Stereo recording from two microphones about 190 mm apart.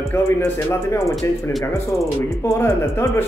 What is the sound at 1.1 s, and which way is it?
Speech, centre (ahead or behind).